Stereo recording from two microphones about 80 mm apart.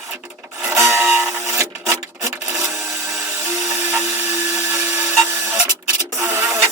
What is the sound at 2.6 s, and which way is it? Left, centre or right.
Printer, right.